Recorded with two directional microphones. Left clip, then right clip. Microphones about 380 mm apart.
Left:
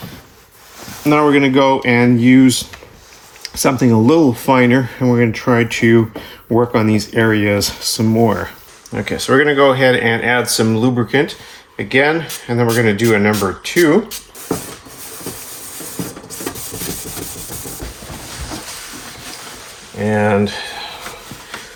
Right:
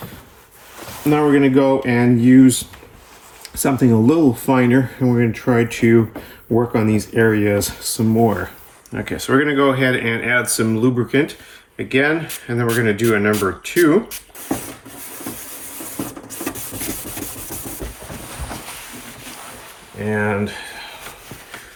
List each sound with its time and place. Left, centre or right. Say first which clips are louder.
1.1 s speech: left 3 dB; centre
20.1 s speech: left 6 dB; centre